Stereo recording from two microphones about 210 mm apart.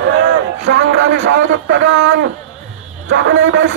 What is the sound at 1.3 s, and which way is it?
A man's voice, 60° right (ahead or behind).